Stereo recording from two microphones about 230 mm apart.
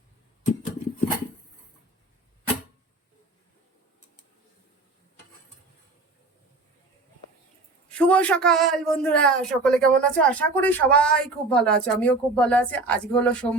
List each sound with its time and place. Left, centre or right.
7.9 s a man's voice: centre